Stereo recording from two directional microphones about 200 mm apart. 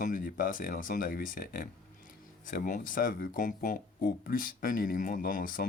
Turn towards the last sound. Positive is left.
turn(degrees=45)  # may be behind; listen again after turning